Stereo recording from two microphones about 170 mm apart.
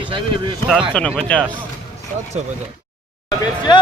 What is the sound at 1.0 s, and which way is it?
Speech, 5° left (ahead or behind).